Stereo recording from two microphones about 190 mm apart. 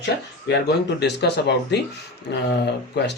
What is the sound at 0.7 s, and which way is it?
Speech, 60° left (ahead or behind).